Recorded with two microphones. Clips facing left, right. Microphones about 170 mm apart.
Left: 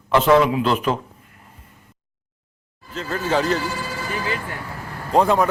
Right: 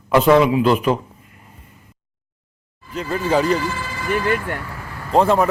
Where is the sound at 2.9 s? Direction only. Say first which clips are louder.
Right 3 dB; 10° right (ahead or behind).